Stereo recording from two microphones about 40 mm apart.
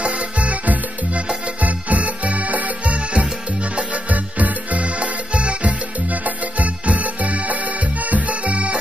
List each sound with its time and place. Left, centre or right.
0.0 s music: right